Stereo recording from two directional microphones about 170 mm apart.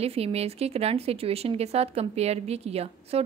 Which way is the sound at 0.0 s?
35° right (ahead or behind).